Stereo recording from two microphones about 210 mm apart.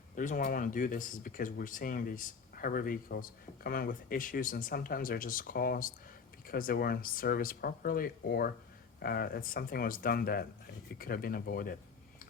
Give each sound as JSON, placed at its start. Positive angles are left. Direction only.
{"t": 0.2, "sound": "speech", "side_deg": 40}